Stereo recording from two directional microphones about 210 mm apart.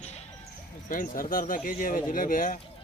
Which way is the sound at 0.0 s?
30° left (ahead or behind).